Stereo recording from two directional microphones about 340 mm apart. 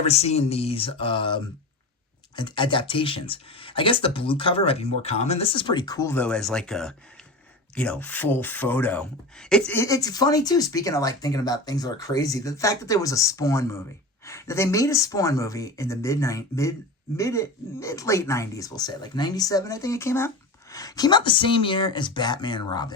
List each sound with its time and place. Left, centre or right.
0.0 s speech: centre